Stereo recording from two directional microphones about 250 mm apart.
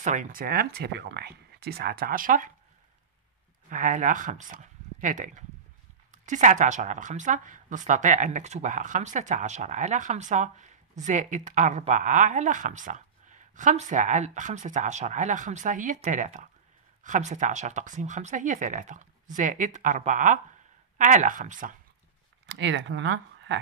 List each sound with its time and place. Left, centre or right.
0.0 s speech: right
3.7 s a woman's voice: right
22.5 s speech: right